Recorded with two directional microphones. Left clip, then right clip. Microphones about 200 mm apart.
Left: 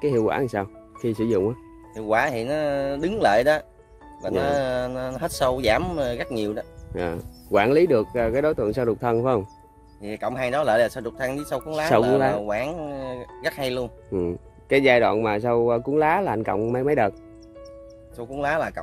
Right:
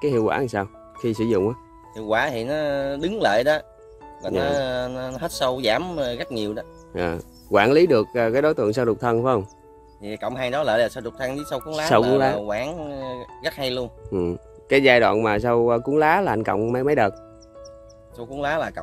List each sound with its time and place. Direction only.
0.0 s speech: 10° right (ahead or behind)
2.0 s speech: 10° left (ahead or behind)
6.9 s speech: 15° right (ahead or behind)
10.0 s speech: 5° left (ahead or behind)
14.1 s speech: 15° right (ahead or behind)
18.1 s speech: 10° left (ahead or behind)